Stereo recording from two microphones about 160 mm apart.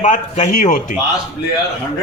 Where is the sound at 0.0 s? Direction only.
50° left (ahead or behind).